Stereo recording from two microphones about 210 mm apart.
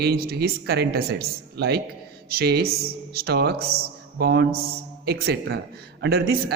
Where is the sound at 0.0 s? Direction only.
45° right (ahead or behind).